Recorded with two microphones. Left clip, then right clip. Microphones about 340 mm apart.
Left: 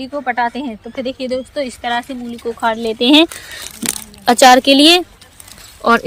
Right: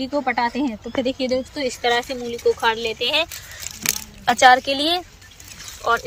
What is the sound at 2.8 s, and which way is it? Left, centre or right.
Speech, left.